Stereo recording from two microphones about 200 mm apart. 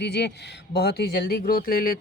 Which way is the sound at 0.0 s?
55° left (ahead or behind).